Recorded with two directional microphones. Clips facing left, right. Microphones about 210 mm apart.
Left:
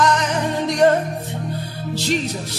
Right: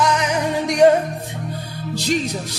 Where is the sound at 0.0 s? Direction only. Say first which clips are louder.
Even; 10° right (ahead or behind).